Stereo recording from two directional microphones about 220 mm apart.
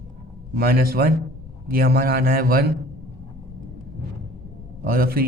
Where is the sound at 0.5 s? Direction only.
45° right (ahead or behind).